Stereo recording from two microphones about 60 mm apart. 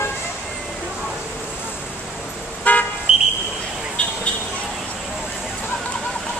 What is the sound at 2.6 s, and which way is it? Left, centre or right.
Car, left.